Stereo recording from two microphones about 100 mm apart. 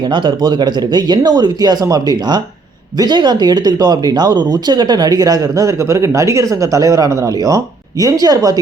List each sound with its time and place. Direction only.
0.0 s speech: 50° right (ahead or behind)